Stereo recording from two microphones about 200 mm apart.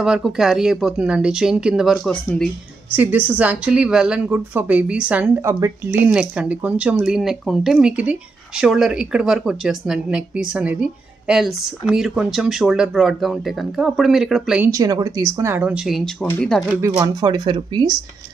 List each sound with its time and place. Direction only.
0.0 s speech: 5° right (ahead or behind)
2.9 s speech: 10° right (ahead or behind)
14.7 s speech: 15° right (ahead or behind)